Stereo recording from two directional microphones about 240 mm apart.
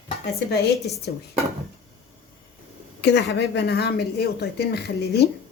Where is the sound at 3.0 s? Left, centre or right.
Left.